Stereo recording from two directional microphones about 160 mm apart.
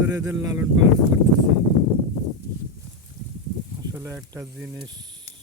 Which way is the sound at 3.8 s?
20° right (ahead or behind).